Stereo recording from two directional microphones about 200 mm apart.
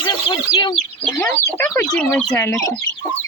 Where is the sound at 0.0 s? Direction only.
25° left (ahead or behind).